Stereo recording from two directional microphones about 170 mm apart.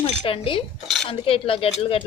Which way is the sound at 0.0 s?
30° left (ahead or behind).